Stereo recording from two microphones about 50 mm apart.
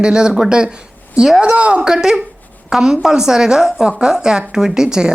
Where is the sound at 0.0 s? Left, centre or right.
Centre.